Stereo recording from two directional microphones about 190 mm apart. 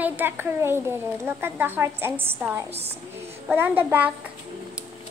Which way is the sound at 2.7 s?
35° right (ahead or behind).